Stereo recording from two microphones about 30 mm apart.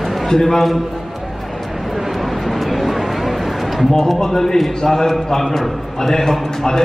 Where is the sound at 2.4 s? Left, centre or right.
Centre.